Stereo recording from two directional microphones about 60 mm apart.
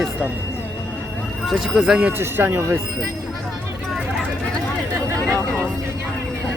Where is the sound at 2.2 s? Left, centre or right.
Right.